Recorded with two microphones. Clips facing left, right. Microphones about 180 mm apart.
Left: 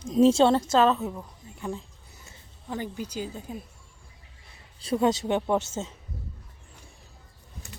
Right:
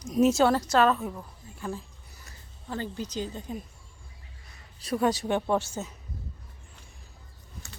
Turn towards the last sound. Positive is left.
turn(degrees=25)  # may be behind; listen again after turning